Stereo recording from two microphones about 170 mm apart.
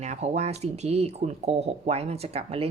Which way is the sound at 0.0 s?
40° right (ahead or behind).